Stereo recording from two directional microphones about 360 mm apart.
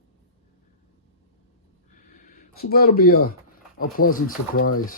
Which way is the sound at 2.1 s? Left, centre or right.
Left.